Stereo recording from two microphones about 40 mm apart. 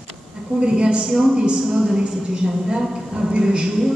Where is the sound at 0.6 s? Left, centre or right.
Right.